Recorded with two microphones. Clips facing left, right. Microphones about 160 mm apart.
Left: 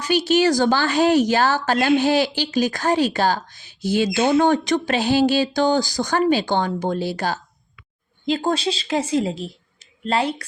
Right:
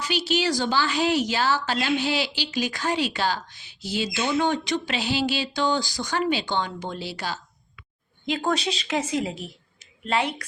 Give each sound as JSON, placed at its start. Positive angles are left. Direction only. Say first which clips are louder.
{"t": 0.0, "sound": "a woman's voice", "louder": "left 7 dB", "side_deg": 45}
{"t": 8.3, "sound": "a woman's voice", "louder": "left 4 dB", "side_deg": 30}